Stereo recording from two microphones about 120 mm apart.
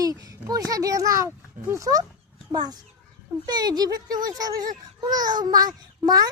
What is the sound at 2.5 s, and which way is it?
A child's voice, 35° right (ahead or behind).